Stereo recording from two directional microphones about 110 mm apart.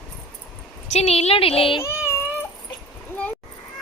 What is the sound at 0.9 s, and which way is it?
Speech, 75° left (ahead or behind).